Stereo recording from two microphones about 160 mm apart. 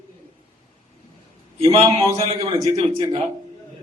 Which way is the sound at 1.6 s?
35° right (ahead or behind).